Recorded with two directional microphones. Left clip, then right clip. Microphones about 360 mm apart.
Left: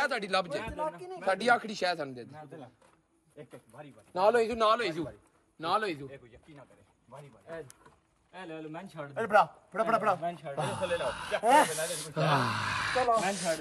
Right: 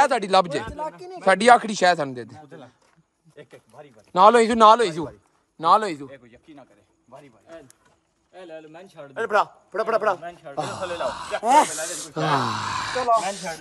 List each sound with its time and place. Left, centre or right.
0.0 s speech: centre
4.1 s speech: right
9.1 s speech: centre